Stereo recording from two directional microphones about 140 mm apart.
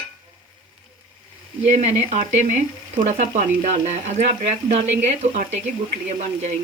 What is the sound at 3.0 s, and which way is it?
Speech, 65° right (ahead or behind).